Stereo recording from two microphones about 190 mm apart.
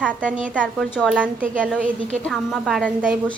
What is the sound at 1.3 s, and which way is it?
Speech, 45° right (ahead or behind).